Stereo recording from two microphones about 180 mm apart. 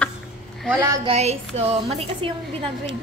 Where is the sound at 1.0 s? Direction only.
35° right (ahead or behind).